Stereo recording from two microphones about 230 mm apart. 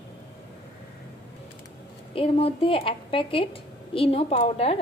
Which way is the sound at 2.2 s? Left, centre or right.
Left.